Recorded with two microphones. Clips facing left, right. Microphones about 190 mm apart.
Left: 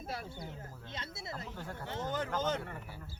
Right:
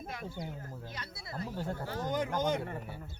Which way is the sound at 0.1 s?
30° left (ahead or behind).